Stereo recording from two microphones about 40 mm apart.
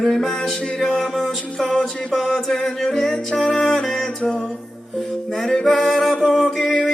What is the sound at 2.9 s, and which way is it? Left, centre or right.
Music, centre.